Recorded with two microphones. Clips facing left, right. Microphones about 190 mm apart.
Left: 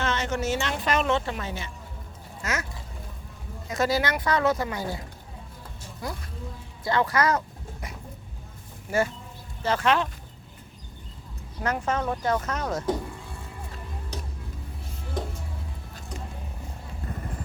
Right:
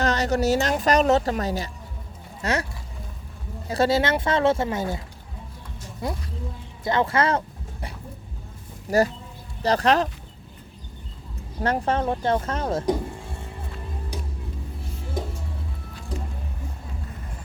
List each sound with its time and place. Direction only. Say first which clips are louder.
0.0 s a woman's voice: right 6 dB; 40° right (ahead or behind)
3.7 s speech: right 4 dB; 30° right (ahead or behind)
6.8 s a sound: right 2 dB; 25° right (ahead or behind)
8.9 s a woman's voice: right 5 dB; 40° right (ahead or behind)
11.6 s speech: right 4 dB; 30° right (ahead or behind)
12.8 s music: right 3 dB; 15° right (ahead or behind)
14.1 s vehicle: right 2 dB; 10° right (ahead or behind)